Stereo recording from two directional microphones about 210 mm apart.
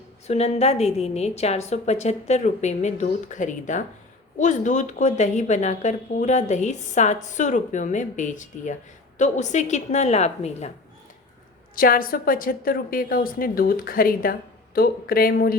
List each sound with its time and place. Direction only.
0.3 s speech: 30° left (ahead or behind)
11.7 s a woman's voice: 45° left (ahead or behind)